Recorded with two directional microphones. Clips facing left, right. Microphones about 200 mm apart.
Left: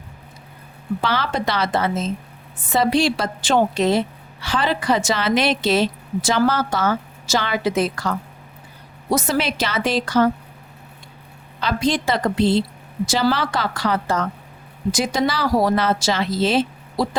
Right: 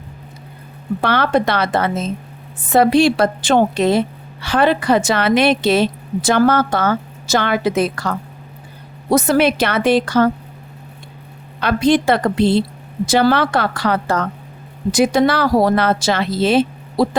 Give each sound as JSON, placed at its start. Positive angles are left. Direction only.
{"t": 1.0, "sound": "a woman's voice", "side_deg": -60}
{"t": 11.6, "sound": "a woman's voice", "side_deg": -60}